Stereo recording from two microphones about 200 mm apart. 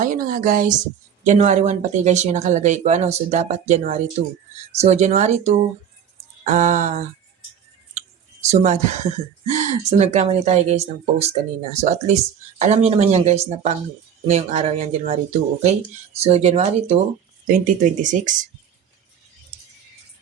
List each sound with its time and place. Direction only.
0.0 s a woman's voice: 45° right (ahead or behind)
8.4 s speech: 35° right (ahead or behind)
18.0 s speech: 40° right (ahead or behind)